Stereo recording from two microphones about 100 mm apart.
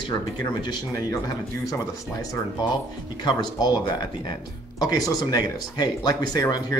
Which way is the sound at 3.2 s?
45° left (ahead or behind).